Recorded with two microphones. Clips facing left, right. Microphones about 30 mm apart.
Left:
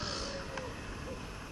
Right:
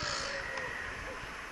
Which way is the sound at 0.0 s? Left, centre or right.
Right.